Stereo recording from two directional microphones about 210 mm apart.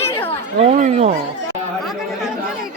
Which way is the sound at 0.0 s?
10° left (ahead or behind).